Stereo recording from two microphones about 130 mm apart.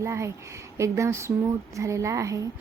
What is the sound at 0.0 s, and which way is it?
Speech, 20° right (ahead or behind).